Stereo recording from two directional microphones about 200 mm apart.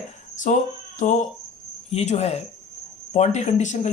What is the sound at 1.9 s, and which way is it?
Speech, 30° left (ahead or behind).